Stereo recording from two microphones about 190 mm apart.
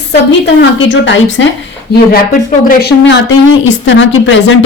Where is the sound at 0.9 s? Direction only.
70° left (ahead or behind).